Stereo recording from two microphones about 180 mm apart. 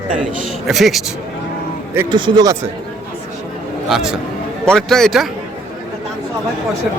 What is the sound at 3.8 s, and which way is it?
A man's voice, centre (ahead or behind).